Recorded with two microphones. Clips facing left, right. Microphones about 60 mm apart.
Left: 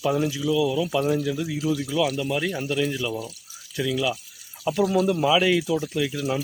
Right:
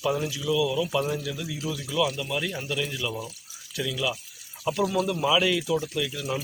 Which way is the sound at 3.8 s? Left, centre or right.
Centre.